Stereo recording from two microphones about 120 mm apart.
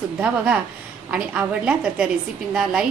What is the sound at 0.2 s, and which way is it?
A woman's voice, 10° right (ahead or behind).